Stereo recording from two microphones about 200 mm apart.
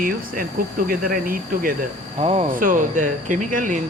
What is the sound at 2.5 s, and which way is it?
Speech, 45° right (ahead or behind).